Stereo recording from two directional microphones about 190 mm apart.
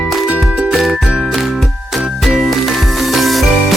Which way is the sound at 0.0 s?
Centre (ahead or behind).